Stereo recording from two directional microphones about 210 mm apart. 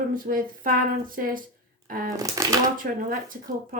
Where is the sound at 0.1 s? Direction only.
40° right (ahead or behind).